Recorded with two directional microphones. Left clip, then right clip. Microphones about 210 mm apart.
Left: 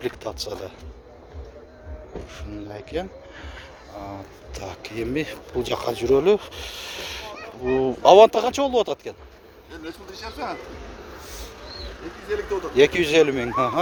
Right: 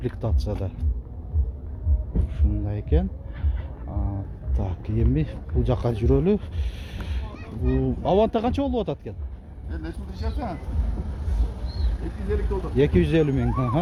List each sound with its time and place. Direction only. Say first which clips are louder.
0.0 s speech: left 3 dB; 15° left (ahead or behind)
2.9 s speech: right 1 dB; 20° left (ahead or behind)
4.5 s speech: left 1 dB; 20° left (ahead or behind)
9.8 s speech: left 2 dB; 10° left (ahead or behind)
12.3 s speech: left 4 dB; 20° left (ahead or behind)